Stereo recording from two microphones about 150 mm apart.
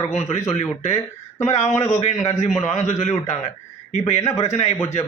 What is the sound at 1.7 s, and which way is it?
Speech, 15° left (ahead or behind).